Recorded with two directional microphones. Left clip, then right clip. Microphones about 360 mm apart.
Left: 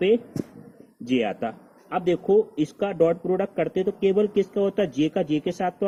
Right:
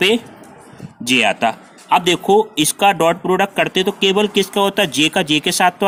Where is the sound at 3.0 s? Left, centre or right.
Right.